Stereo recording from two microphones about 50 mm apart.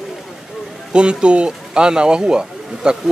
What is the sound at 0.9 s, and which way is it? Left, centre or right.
Speech, centre.